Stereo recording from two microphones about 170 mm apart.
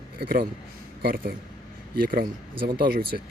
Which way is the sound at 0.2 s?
60° right (ahead or behind).